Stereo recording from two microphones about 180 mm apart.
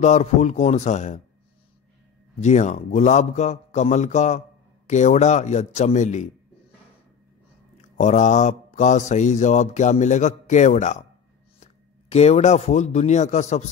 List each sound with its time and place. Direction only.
0.0 s a man's voice: 40° left (ahead or behind)
2.4 s a man's voice: 40° left (ahead or behind)
7.7 s speech: 40° left (ahead or behind)